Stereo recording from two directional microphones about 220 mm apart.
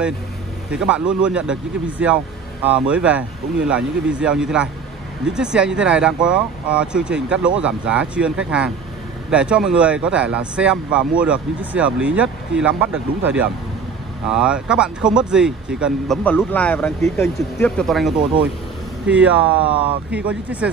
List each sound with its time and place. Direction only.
0.7 s speech: 5° right (ahead or behind)
16.3 s speech: 5° left (ahead or behind)